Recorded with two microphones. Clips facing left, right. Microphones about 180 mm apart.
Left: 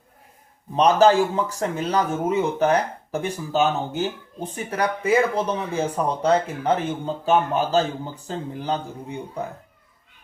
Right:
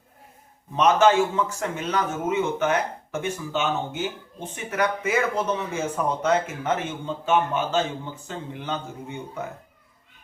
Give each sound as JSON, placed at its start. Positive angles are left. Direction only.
{"t": 0.8, "sound": "a man's voice", "side_deg": 35}